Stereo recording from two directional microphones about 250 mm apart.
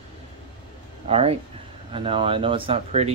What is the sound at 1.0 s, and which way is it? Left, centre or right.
Speech, right.